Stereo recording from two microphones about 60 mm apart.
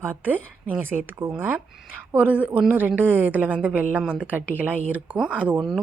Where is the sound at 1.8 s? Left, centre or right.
Right.